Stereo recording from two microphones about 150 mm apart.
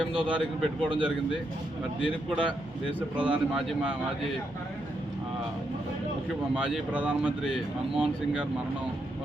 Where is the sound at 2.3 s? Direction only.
35° right (ahead or behind).